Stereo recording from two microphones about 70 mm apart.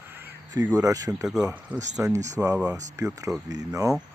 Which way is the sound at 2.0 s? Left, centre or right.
Right.